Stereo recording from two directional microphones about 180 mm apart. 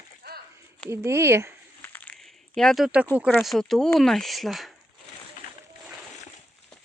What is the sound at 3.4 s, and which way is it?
Speech, centre (ahead or behind).